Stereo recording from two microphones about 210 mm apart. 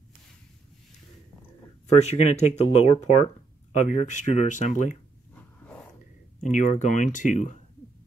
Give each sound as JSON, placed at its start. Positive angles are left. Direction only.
{"t": 1.9, "sound": "speech", "side_deg": 30}
{"t": 6.4, "sound": "speech", "side_deg": 35}